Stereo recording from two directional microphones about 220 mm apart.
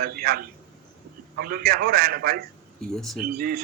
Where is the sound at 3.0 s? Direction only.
Centre (ahead or behind).